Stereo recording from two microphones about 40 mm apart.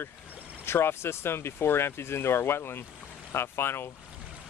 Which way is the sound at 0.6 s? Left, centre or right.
Left.